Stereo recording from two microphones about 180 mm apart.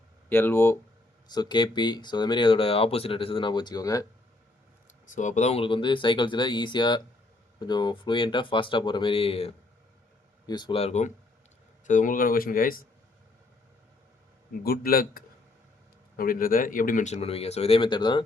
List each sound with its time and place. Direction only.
0.3 s speech: 10° left (ahead or behind)
1.3 s speech: 25° left (ahead or behind)
5.1 s speech: 45° left (ahead or behind)
14.6 s speech: 55° left (ahead or behind); by 18.3 s 25° left (ahead or behind)